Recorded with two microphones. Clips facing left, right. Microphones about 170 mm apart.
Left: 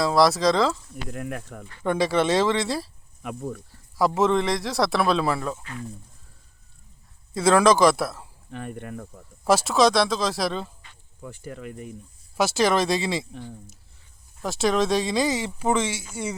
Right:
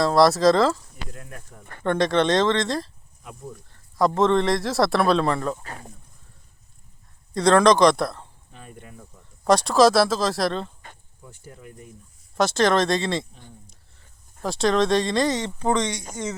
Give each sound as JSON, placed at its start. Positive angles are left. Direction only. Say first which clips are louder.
{"t": 0.0, "sound": "a man's voice", "louder": "right 3 dB", "side_deg": 0}
{"t": 1.1, "sound": "speech", "louder": "left 10 dB", "side_deg": 70}
{"t": 1.8, "sound": "speech", "louder": "right 1 dB", "side_deg": 5}
{"t": 3.2, "sound": "speech", "louder": "left 7 dB", "side_deg": 70}
{"t": 3.7, "sound": "a man's voice", "louder": "right 2 dB", "side_deg": 5}
{"t": 7.3, "sound": "a man's voice", "louder": "right 1 dB", "side_deg": 5}
{"t": 8.4, "sound": "speech", "louder": "left 12 dB", "side_deg": 65}
{"t": 9.4, "sound": "a man's voice", "louder": "right 2 dB", "side_deg": 5}
{"t": 11.2, "sound": "speech", "louder": "left 8 dB", "side_deg": 90}
{"t": 12.4, "sound": "a man's voice", "louder": "right 2 dB", "side_deg": 5}
{"t": 14.4, "sound": "a man's voice", "louder": "right 2 dB", "side_deg": 5}